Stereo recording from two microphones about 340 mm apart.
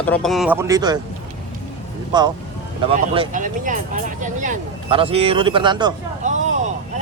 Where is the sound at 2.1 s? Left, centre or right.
Centre.